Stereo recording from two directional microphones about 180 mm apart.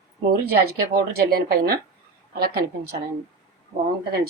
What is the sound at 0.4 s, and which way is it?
A woman's voice, 60° right (ahead or behind).